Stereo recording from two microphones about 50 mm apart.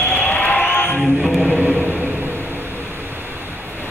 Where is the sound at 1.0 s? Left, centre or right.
Centre.